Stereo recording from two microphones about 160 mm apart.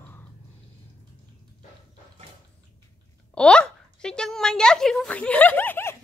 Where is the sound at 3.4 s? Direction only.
5° left (ahead or behind).